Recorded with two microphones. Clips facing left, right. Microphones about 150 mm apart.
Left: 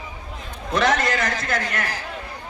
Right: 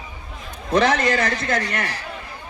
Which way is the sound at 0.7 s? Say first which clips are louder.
Right 3 dB; 35° right (ahead or behind).